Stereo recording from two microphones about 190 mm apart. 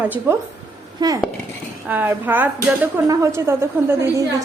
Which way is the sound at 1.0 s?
20° right (ahead or behind).